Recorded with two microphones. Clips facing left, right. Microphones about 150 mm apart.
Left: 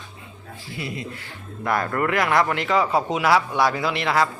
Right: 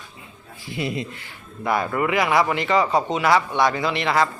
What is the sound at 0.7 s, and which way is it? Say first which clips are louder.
Speech: right 5 dB; 20° right (ahead or behind).